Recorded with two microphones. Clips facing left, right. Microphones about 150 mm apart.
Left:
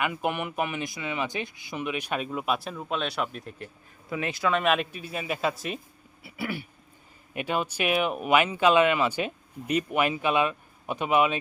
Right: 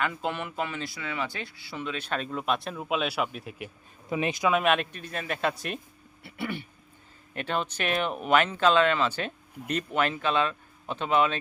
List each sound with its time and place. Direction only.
0.0 s speech: 15° left (ahead or behind); by 3.7 s 5° right (ahead or behind)
4.1 s speech: 20° right (ahead or behind)
4.6 s speech: centre (ahead or behind)